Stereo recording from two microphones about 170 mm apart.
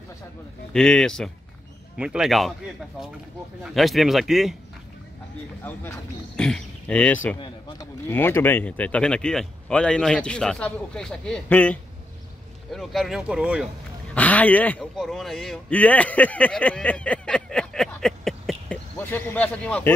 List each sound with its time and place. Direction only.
0.7 s speech: 5° left (ahead or behind)
3.6 s speech: centre (ahead or behind)
5.6 s speech: 10° left (ahead or behind)
7.3 s speech: 25° left (ahead or behind)
8.1 s speech: 10° left (ahead or behind); by 13.7 s 5° right (ahead or behind)
14.0 s speech: 10° left (ahead or behind)